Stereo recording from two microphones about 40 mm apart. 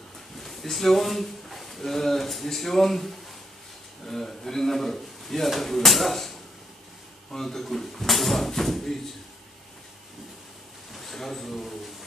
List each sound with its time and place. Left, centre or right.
0.4 s speech: centre
7.3 s speech: centre
10.9 s a sound: centre